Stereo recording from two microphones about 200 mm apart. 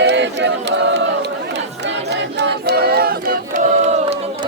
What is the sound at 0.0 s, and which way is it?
Choir, 60° right (ahead or behind).